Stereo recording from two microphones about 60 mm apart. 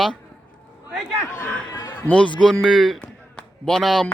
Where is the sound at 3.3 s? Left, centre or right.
Centre.